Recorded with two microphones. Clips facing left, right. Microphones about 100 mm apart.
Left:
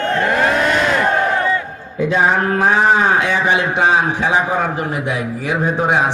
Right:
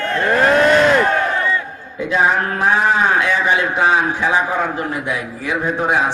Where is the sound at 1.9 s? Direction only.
30° left (ahead or behind).